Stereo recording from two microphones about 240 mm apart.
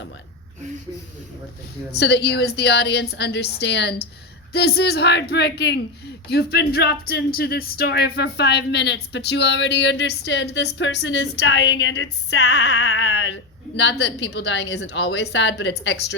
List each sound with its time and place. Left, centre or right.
1.9 s speech: left